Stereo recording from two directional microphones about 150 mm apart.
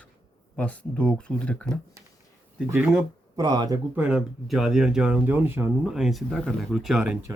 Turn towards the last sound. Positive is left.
turn(degrees=-5)  # may be behind; listen again after turning